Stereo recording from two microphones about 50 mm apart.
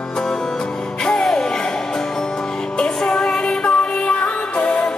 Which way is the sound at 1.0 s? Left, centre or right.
Centre.